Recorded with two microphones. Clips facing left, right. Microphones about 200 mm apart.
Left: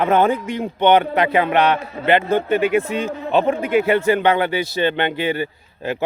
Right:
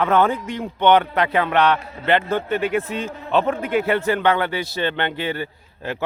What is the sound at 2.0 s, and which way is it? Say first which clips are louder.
Speech: left 4 dB; 15° left (ahead or behind).